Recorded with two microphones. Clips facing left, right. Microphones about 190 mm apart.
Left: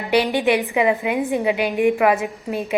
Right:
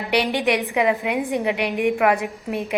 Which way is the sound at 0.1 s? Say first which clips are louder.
Left 3 dB; centre (ahead or behind).